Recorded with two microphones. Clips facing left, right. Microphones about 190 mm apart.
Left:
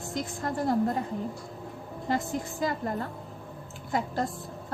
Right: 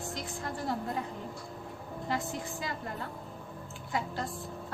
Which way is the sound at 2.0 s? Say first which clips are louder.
Left 5 dB; 45° left (ahead or behind).